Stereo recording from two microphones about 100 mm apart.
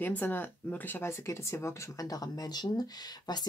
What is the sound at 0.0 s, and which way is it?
A woman's voice, 20° left (ahead or behind).